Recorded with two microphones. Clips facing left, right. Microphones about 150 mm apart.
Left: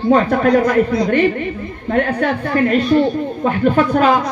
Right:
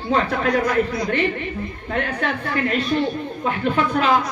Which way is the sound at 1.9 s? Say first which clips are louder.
Left 8 dB; 45° left (ahead or behind).